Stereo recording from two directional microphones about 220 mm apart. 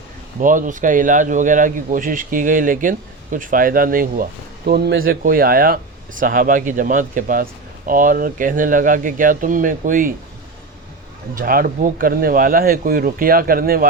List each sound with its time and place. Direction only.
0.3 s speech: 35° right (ahead or behind)
11.3 s speech: 40° right (ahead or behind)